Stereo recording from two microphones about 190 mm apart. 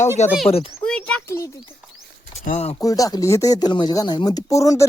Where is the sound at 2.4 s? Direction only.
35° left (ahead or behind).